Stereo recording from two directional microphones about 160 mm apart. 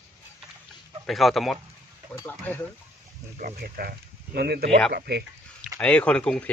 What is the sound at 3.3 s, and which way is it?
Speech, 65° right (ahead or behind).